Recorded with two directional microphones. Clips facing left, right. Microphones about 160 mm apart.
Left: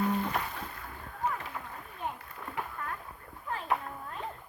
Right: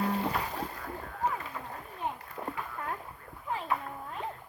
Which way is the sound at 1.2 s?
35° right (ahead or behind).